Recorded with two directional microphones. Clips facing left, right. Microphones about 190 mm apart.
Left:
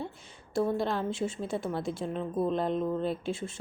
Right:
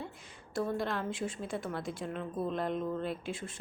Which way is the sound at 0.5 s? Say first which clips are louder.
Left 5 dB; 25° left (ahead or behind).